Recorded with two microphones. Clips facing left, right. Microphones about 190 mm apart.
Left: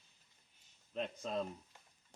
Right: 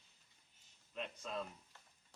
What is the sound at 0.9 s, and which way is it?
Speech, 35° left (ahead or behind).